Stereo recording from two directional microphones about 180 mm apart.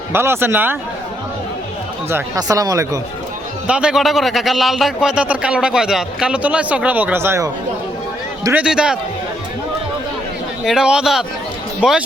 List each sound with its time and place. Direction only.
0.1 s a man's voice: 15° right (ahead or behind)
2.0 s speech: 15° right (ahead or behind)
3.7 s a man's voice: 5° right (ahead or behind)
8.5 s a man's voice: 5° right (ahead or behind)
10.6 s a man's voice: 5° right (ahead or behind)